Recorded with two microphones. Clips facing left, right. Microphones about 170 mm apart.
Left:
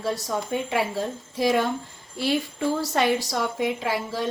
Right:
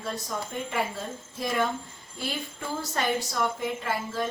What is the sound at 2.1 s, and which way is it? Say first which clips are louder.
Speech: left 9 dB; 90° left.